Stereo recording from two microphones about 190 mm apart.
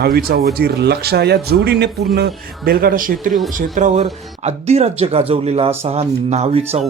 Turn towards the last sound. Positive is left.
turn(degrees=-35)  # may be behind; listen again after turning